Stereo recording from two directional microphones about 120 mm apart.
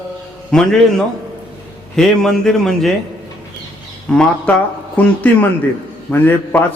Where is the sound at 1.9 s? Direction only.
5° left (ahead or behind).